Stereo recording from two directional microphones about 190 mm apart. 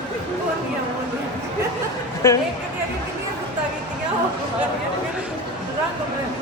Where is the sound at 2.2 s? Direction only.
15° left (ahead or behind).